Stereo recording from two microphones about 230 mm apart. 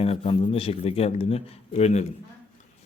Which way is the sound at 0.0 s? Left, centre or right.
Left.